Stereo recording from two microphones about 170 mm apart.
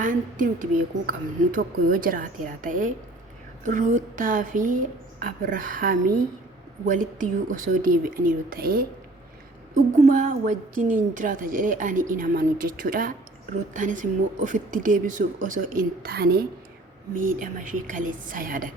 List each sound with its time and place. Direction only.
0.0 s a woman's voice: 50° right (ahead or behind)
9.7 s a woman's voice: 45° right (ahead or behind); by 16.5 s 60° right (ahead or behind)
17.2 s a woman's voice: 50° right (ahead or behind)